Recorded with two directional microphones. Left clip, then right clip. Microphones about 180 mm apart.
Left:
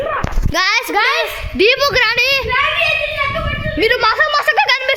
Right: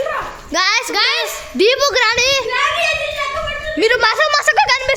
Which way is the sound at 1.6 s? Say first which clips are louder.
Left 1 dB; 5° right (ahead or behind).